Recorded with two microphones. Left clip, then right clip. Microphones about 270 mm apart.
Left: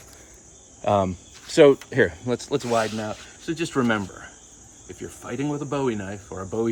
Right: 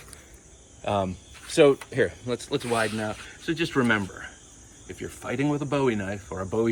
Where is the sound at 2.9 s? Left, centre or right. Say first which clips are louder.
Even; centre.